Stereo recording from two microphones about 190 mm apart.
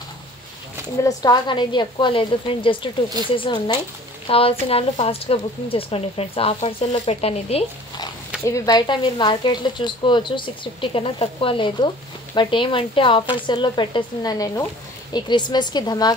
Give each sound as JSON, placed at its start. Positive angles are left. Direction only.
{"t": 1.0, "sound": "speech", "side_deg": 20}
{"t": 8.5, "sound": "speech", "side_deg": 20}